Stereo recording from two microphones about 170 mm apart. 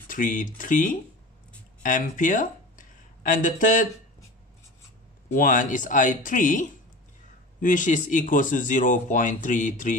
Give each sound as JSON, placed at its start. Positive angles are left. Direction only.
{"t": 0.1, "sound": "speech", "side_deg": 50}
{"t": 5.3, "sound": "speech", "side_deg": 50}